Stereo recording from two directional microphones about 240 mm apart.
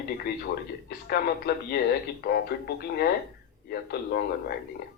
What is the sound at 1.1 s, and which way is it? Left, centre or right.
Speech, left.